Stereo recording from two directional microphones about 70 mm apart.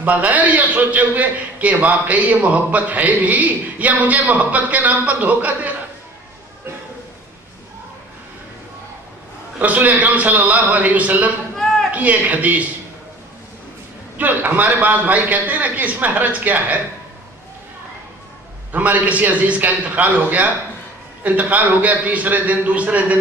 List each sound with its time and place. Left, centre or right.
0.0 s a man's voice: right
9.6 s a man's voice: right
14.1 s a man's voice: right
18.7 s a man's voice: right